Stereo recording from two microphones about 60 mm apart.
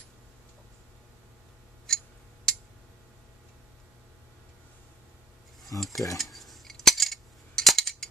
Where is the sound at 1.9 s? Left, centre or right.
Centre.